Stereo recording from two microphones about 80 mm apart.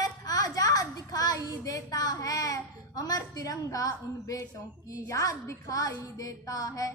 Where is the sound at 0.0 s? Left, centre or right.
Left.